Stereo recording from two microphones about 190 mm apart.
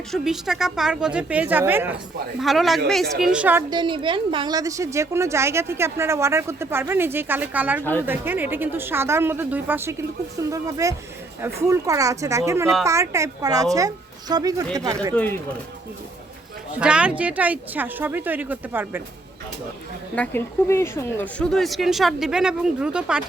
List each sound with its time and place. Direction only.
0.1 s speech: centre (ahead or behind)
3.7 s a woman's voice: 25° right (ahead or behind)
15.1 s speech: 10° left (ahead or behind)
16.8 s a woman's voice: 5° right (ahead or behind)
20.1 s speech: 10° left (ahead or behind)